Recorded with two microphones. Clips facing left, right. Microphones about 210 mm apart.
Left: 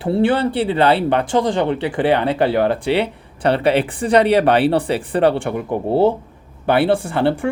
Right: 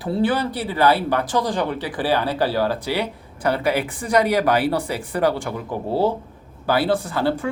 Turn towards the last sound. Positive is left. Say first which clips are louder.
# left 4 dB
turn(degrees=25)  # may be behind; listen again after turning